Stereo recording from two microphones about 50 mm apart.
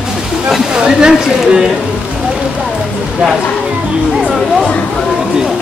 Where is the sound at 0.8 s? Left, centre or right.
Centre.